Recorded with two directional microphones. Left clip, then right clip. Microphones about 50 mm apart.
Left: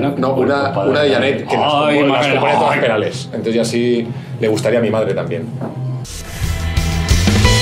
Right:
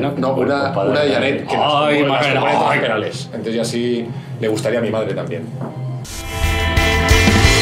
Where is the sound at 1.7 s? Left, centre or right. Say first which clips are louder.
Left 2 dB; right.